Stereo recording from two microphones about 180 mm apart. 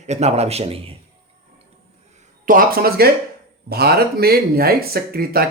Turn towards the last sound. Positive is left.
turn(degrees=-55)  # may be behind; listen again after turning